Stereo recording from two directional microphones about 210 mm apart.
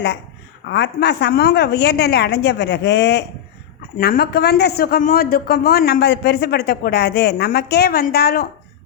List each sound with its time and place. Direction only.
0.7 s a woman's voice: 55° left (ahead or behind)
3.9 s a woman's voice: 45° left (ahead or behind)